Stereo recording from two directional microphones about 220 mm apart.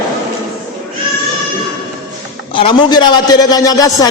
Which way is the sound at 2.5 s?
25° left (ahead or behind).